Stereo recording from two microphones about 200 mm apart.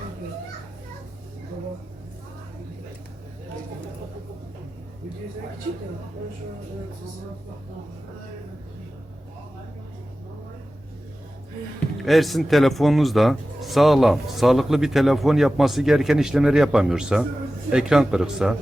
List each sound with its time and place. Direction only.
12.0 s speech: centre (ahead or behind)